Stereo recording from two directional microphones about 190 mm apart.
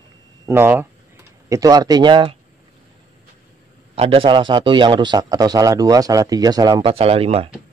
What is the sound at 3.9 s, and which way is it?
A man's voice, 30° right (ahead or behind).